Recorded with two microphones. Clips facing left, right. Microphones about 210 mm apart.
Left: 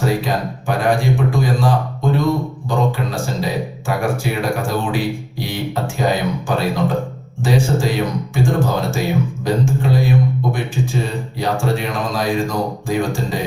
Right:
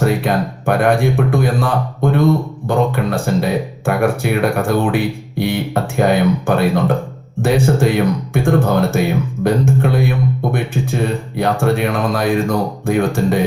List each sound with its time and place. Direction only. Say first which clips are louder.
0.0 s speech: right 3 dB; 60° right (ahead or behind)